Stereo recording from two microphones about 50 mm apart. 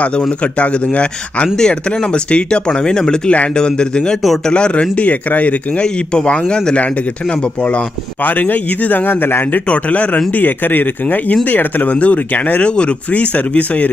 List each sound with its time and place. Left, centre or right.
0.4 s speech: left
6.1 s speech: centre
8.2 s a man's voice: left
9.7 s speech: left
10.3 s a man's voice: left